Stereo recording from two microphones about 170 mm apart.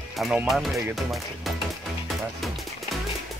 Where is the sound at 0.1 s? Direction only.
5° right (ahead or behind).